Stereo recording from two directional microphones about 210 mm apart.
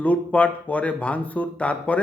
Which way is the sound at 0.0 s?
5° left (ahead or behind).